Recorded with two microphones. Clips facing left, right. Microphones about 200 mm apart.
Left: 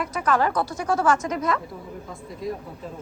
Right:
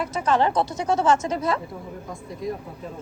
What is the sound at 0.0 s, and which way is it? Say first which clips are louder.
A woman's voice: right 1 dB; 25° right (ahead or behind).